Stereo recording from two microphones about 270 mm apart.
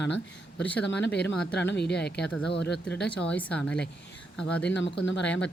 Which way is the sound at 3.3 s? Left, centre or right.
Centre.